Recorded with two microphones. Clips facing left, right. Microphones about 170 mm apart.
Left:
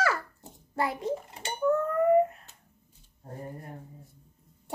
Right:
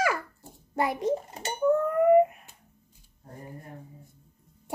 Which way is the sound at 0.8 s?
20° right (ahead or behind).